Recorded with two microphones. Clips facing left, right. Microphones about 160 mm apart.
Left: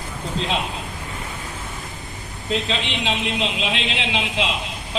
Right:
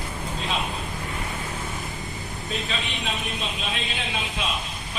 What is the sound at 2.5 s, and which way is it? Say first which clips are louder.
A man's voice: left 7 dB; 90° left.